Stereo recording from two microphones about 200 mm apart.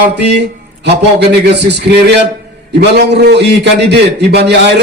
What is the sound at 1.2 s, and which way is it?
Speech, 55° right (ahead or behind).